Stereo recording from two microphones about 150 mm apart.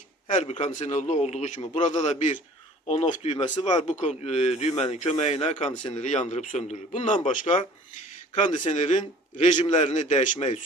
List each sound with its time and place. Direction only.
0.3 s speech: 55° left (ahead or behind)
2.8 s speech: 40° left (ahead or behind)
4.0 s speech: 50° left (ahead or behind)